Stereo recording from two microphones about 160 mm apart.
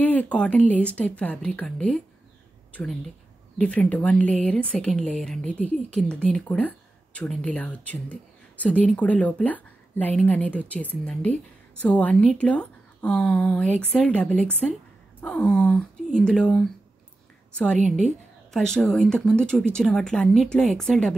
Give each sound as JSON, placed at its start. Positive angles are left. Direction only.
{"t": 0.0, "sound": "a woman's voice", "side_deg": 10}
{"t": 17.7, "sound": "a woman's voice", "side_deg": -50}
{"t": 18.5, "sound": "speech", "side_deg": 0}